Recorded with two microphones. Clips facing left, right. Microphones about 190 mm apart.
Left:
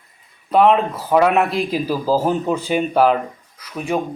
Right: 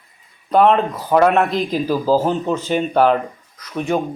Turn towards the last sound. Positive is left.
turn(degrees=10)  # may be behind; listen again after turning